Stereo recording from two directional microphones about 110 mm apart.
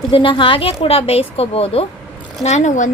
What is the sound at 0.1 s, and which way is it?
A woman's voice, 50° left (ahead or behind).